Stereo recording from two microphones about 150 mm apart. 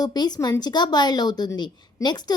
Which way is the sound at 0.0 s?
25° left (ahead or behind).